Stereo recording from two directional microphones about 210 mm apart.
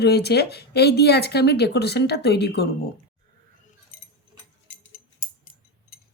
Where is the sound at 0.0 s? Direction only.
50° left (ahead or behind).